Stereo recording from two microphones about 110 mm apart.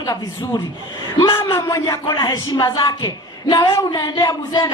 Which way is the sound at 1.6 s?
40° left (ahead or behind).